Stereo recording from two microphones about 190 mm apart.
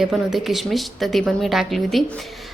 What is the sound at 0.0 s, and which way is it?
Speech, centre (ahead or behind).